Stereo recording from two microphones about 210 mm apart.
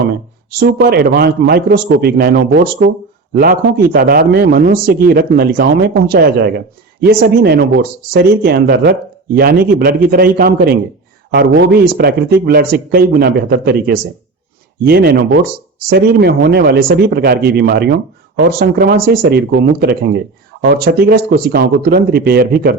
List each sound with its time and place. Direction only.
0.6 s a man's voice: 50° right (ahead or behind)